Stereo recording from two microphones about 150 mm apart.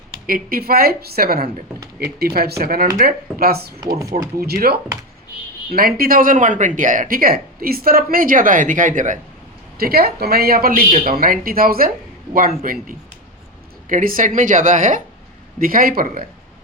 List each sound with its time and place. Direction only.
0.3 s a woman's voice: 75° right (ahead or behind); by 3.8 s 90° right
3.8 s speech: 25° right (ahead or behind)
4.4 s speech: 90° right
5.7 s speech: 75° right (ahead or behind); by 9.1 s 60° right (ahead or behind)
9.7 s speech: 90° right; by 15.0 s 60° right (ahead or behind)
15.5 s speech: 70° right (ahead or behind)